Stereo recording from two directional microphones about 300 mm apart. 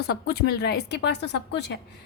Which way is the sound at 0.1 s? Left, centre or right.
Left.